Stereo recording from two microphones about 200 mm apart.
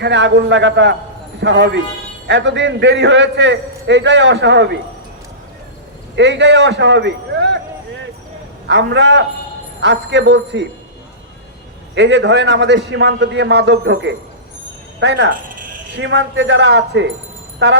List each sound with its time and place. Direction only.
0.0 s a man's voice: 60° right (ahead or behind)
6.1 s a man's voice: 65° right (ahead or behind)
8.6 s a man's voice: 60° right (ahead or behind)
11.9 s a man's voice: 65° right (ahead or behind)